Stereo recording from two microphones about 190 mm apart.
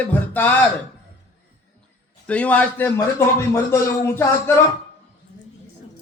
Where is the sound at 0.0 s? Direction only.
10° left (ahead or behind).